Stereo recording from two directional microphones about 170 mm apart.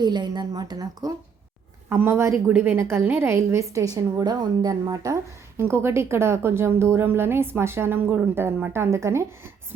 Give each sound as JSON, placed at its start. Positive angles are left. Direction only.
{"t": 0.0, "sound": "a woman's voice", "side_deg": -25}